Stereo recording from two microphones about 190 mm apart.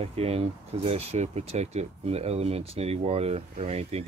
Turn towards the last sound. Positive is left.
turn(degrees=-35)  # may be behind; listen again after turning